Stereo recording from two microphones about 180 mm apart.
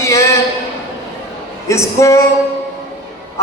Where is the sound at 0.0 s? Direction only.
15° left (ahead or behind).